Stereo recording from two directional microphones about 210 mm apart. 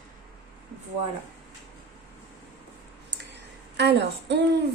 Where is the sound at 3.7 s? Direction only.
55° right (ahead or behind).